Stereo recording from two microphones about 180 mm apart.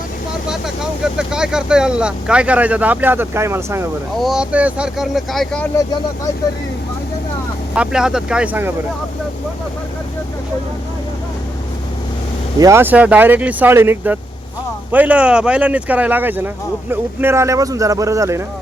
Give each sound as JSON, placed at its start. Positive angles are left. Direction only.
{"t": 1.0, "sound": "speech", "side_deg": -5}
{"t": 4.2, "sound": "speech", "side_deg": -5}
{"t": 5.7, "sound": "speech", "side_deg": 20}
{"t": 7.8, "sound": "speech", "side_deg": -5}
{"t": 12.5, "sound": "speech", "side_deg": -15}